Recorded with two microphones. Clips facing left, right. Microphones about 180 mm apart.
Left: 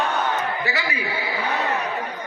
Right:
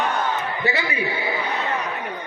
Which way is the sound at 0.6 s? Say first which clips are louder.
Right 3 dB; 25° right (ahead or behind).